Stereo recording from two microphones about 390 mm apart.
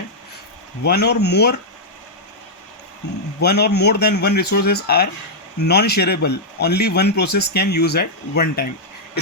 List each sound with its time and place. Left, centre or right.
0.9 s speech: left
3.4 s speech: left